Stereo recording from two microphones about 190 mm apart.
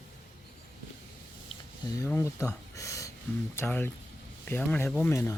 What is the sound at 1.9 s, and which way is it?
Speech, 15° left (ahead or behind).